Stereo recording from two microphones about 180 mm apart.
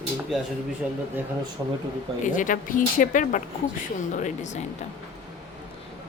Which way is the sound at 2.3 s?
45° left (ahead or behind).